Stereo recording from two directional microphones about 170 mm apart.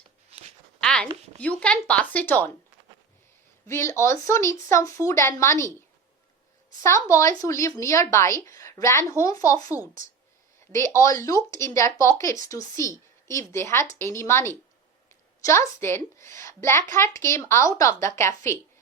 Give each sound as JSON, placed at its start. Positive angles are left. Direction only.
{"t": 0.8, "sound": "a sound", "side_deg": 5}
{"t": 1.4, "sound": "speech", "side_deg": 10}
{"t": 3.7, "sound": "speech", "side_deg": 15}
{"t": 6.8, "sound": "speech", "side_deg": 15}